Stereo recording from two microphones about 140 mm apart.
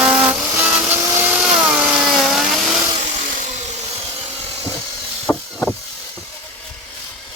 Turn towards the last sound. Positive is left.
turn(degrees=15)  # may be behind; listen again after turning